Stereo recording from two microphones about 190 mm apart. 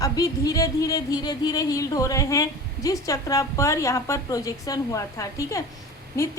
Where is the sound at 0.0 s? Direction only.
20° left (ahead or behind).